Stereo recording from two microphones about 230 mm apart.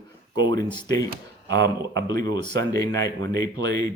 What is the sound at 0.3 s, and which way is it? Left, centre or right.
Speech, centre.